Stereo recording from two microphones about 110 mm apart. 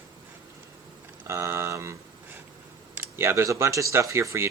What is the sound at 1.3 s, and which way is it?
Speech, 25° right (ahead or behind).